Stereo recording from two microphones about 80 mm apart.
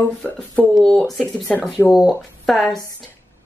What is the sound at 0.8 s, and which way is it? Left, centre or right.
A woman's voice, centre.